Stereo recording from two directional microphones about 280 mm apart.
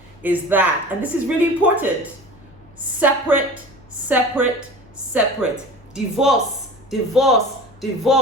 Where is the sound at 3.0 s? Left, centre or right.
Centre.